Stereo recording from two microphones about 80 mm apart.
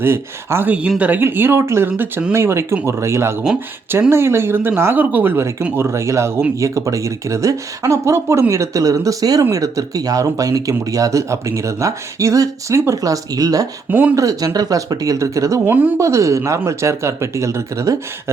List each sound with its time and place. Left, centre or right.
0.0 s speech: right
0.7 s speech: centre; by 15.6 s right
15.6 s speech: right
16.0 s speech: right